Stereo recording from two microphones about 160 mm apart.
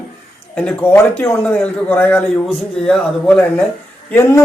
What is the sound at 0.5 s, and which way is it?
A man's voice, 10° left (ahead or behind).